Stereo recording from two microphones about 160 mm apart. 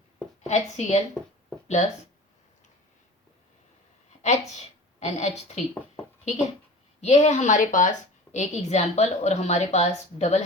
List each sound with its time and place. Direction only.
0.4 s a woman's voice: 45° left (ahead or behind)
4.2 s a woman's voice: 45° left (ahead or behind)
7.0 s a woman's voice: 45° left (ahead or behind)